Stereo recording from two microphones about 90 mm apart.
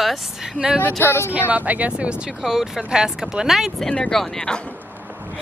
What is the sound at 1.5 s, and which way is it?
Speech, 15° right (ahead or behind).